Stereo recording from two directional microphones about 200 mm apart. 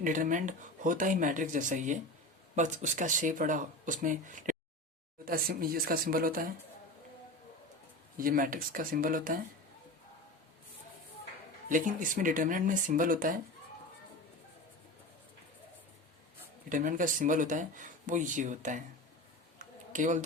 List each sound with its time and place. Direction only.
0.0 s speech: 40° right (ahead or behind)
8.2 s speech: 45° right (ahead or behind)
11.7 s speech: 40° right (ahead or behind)
16.6 s speech: 40° right (ahead or behind)
19.5 s a sound: 40° right (ahead or behind)